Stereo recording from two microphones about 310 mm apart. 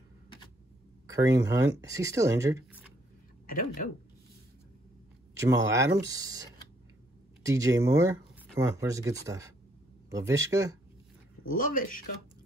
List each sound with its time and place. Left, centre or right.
1.0 s speech: centre
3.4 s speech: left
5.4 s speech: centre
7.4 s speech: centre
11.5 s speech: left